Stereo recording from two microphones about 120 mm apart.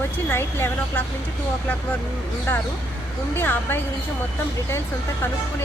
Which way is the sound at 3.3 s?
20° left (ahead or behind).